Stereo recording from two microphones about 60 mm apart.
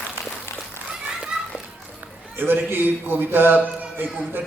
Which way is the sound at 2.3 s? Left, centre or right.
Right.